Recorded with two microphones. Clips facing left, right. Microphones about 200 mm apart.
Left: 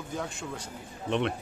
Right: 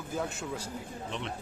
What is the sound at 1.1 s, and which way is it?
Speech, 65° left (ahead or behind).